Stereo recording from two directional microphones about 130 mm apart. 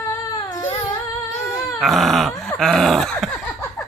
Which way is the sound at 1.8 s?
Centre (ahead or behind).